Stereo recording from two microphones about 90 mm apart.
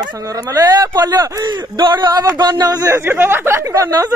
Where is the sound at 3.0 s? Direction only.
25° right (ahead or behind).